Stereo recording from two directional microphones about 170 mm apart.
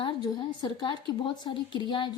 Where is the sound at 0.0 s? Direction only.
25° left (ahead or behind).